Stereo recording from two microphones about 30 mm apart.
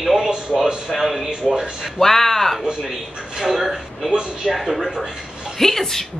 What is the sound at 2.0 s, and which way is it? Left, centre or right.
Speech, centre.